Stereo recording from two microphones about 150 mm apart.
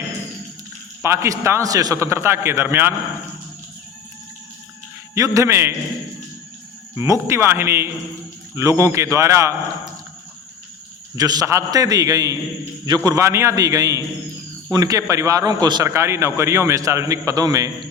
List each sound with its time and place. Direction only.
1.0 s a man's voice: 20° right (ahead or behind)
5.1 s a man's voice: 20° right (ahead or behind)
7.0 s a man's voice: 20° right (ahead or behind)
11.2 s a man's voice: 25° right (ahead or behind)